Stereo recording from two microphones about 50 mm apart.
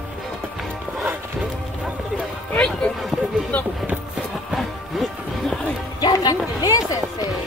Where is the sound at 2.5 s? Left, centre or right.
Centre.